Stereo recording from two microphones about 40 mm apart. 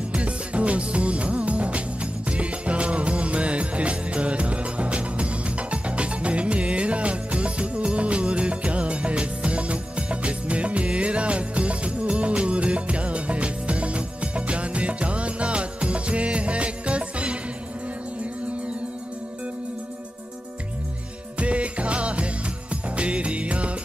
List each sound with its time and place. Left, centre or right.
0.1 s music: right
21.4 s music: right